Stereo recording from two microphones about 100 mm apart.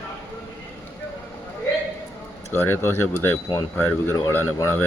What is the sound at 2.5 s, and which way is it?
A man's voice, 25° left (ahead or behind).